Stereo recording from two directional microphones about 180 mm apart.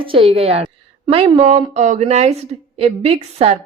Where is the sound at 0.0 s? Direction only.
30° right (ahead or behind).